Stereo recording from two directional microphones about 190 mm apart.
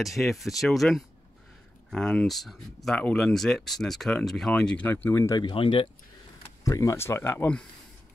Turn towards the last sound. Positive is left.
turn(degrees=10)  # may be behind; listen again after turning